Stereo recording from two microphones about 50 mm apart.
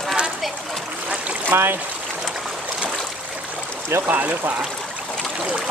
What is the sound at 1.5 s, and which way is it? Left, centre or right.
Speech, right.